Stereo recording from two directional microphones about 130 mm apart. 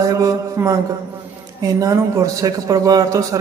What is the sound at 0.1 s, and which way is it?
Speech, 25° right (ahead or behind).